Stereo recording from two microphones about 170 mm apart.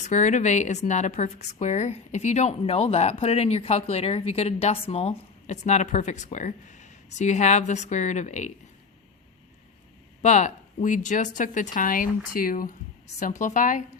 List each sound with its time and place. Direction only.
0.0 s a woman's voice: 45° left (ahead or behind)
10.2 s a woman's voice: 45° left (ahead or behind)